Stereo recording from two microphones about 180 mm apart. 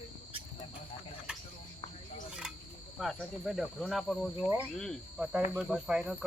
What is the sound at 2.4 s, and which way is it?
Cricket, 5° right (ahead or behind).